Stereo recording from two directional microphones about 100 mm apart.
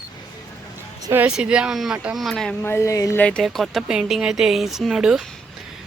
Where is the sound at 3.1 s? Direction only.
15° left (ahead or behind).